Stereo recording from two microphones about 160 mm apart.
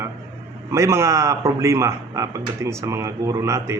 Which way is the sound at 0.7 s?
20° right (ahead or behind).